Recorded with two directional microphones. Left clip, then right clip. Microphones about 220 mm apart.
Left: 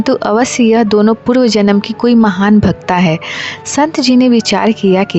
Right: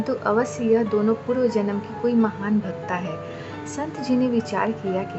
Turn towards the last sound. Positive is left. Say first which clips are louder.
# left 13 dB
turn(degrees=45)  # may be behind; listen again after turning